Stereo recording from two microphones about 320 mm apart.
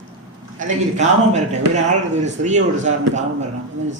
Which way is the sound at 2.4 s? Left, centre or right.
Right.